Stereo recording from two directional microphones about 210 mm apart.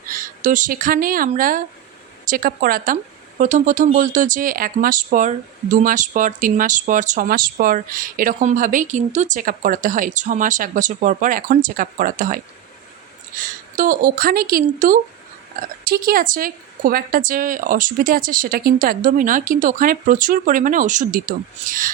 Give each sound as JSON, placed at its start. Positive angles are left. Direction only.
{"t": 0.1, "sound": "speech", "side_deg": -40}